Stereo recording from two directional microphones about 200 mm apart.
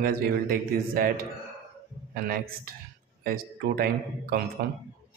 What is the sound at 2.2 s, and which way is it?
Speech, 50° right (ahead or behind).